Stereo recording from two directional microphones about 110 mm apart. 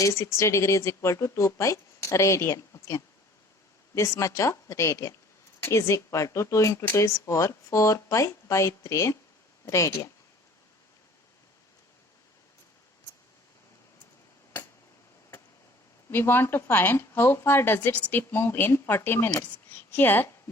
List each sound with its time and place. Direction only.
0.0 s speech: 25° left (ahead or behind)
16.0 s speech: 20° left (ahead or behind)